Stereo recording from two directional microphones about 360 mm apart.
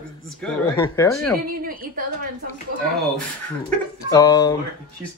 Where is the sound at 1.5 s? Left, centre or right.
Right.